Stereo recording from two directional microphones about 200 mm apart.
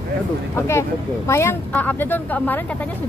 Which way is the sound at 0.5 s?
15° left (ahead or behind).